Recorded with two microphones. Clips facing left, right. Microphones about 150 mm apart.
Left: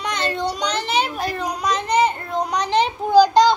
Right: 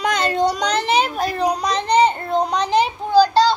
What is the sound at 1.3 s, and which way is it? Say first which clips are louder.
A child's voice: right 4 dB; 35° right (ahead or behind).